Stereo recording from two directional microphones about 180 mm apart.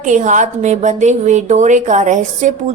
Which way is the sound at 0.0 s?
45° right (ahead or behind).